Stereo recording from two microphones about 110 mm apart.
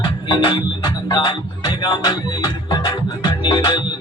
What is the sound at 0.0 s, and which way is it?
Music, 40° left (ahead or behind).